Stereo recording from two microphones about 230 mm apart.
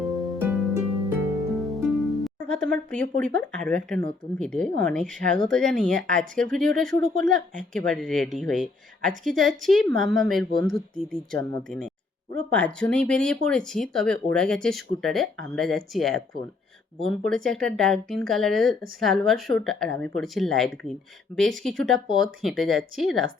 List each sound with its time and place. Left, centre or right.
0.0 s harp: centre
1.5 s speech: centre